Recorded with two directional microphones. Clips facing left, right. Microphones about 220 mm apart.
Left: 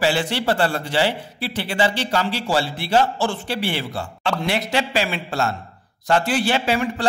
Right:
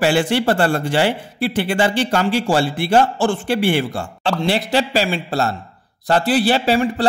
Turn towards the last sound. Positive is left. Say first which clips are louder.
# right 4 dB
turn(degrees=-35)  # may be behind; listen again after turning